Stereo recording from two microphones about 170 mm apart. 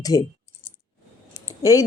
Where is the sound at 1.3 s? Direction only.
20° left (ahead or behind).